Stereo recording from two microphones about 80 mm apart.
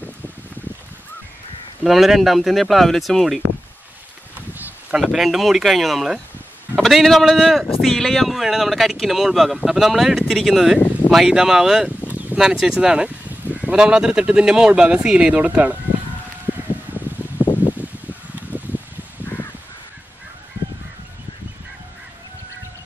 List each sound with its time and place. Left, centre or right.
1.9 s speech: centre
5.1 s speech: centre
17.4 s rustling leaves: left